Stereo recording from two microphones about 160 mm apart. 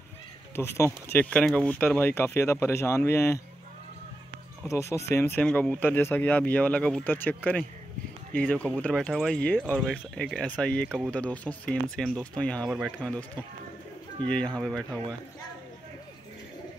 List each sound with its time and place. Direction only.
0.6 s speech: 15° left (ahead or behind)
4.6 s speech: 20° left (ahead or behind)
14.2 s speech: 5° left (ahead or behind)